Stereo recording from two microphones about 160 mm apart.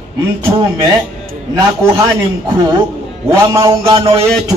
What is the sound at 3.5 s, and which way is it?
Speech, 20° right (ahead or behind).